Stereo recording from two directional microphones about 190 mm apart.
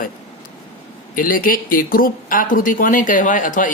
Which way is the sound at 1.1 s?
45° left (ahead or behind).